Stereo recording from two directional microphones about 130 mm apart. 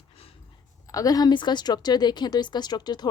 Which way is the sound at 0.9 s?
30° left (ahead or behind).